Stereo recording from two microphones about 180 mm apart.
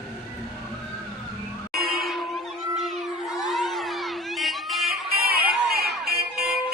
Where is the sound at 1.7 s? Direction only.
55° right (ahead or behind).